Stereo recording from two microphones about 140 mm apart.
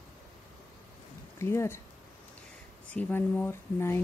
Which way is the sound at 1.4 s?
20° left (ahead or behind).